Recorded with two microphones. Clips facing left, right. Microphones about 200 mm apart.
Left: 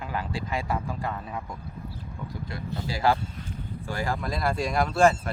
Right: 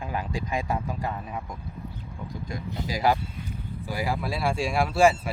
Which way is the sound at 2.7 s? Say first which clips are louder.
Even; 15° right (ahead or behind).